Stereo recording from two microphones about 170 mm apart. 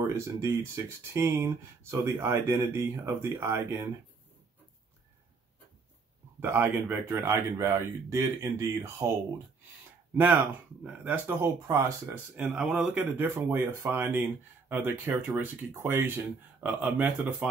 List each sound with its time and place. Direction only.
0.0 s speech: 15° right (ahead or behind)
6.4 s speech: 10° right (ahead or behind)
10.1 s speech: 10° right (ahead or behind)
12.4 s speech: 5° right (ahead or behind)